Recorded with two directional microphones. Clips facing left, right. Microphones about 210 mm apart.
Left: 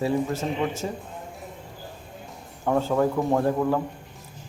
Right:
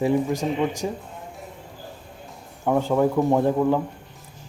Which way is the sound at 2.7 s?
15° right (ahead or behind).